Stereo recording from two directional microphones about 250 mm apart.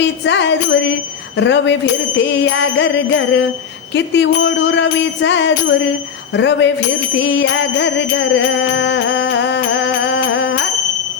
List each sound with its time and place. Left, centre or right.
0.3 s music: left